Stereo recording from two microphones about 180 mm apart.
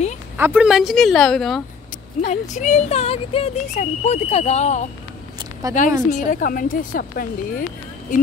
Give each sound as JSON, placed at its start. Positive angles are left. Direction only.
{"t": 0.4, "sound": "speech", "side_deg": -5}
{"t": 2.2, "sound": "speech", "side_deg": 40}
{"t": 5.6, "sound": "speech", "side_deg": -20}
{"t": 6.0, "sound": "a woman's voice", "side_deg": 50}